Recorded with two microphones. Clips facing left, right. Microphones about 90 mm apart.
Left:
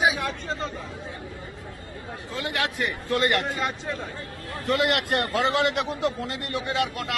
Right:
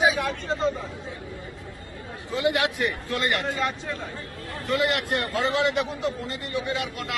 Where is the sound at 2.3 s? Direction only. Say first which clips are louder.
Right 5 dB; 20° right (ahead or behind).